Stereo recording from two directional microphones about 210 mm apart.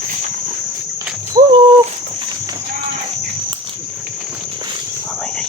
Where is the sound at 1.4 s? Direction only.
30° right (ahead or behind).